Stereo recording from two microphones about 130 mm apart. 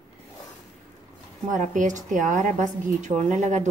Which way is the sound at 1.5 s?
75° right (ahead or behind).